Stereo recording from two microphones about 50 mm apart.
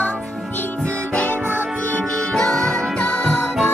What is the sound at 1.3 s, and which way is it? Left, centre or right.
Music, right.